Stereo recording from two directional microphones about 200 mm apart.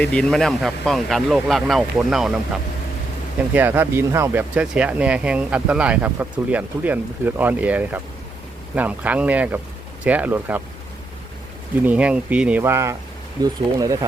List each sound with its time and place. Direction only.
0.0 s speech: 5° left (ahead or behind)
11.9 s speech: 5° right (ahead or behind)